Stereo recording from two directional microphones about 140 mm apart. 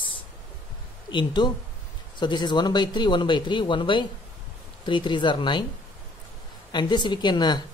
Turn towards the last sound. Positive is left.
turn(degrees=30)  # may be behind; listen again after turning